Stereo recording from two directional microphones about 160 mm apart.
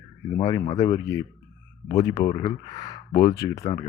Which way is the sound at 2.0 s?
20° left (ahead or behind).